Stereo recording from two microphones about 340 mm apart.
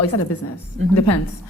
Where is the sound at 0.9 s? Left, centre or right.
Left.